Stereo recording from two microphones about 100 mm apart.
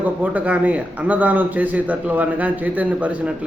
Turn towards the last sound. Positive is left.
turn(degrees=-15)  # may be behind; listen again after turning